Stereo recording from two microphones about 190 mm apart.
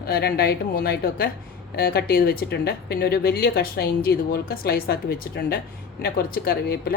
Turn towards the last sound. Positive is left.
turn(degrees=55)  # may be behind; listen again after turning